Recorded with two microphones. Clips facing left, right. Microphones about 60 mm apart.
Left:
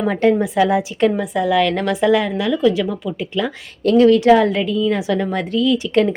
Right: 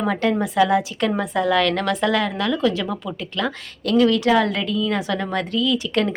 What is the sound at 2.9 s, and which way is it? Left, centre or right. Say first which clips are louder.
Speech: left 3 dB; centre.